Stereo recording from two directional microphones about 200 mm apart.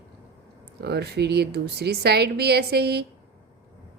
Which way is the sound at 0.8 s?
55° right (ahead or behind).